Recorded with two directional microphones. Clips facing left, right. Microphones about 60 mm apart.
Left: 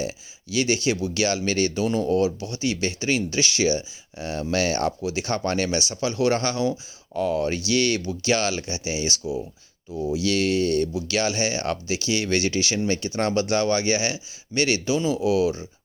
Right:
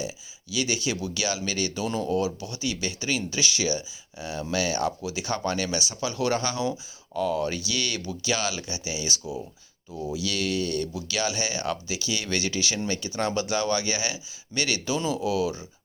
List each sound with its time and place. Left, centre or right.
0.0 s speech: left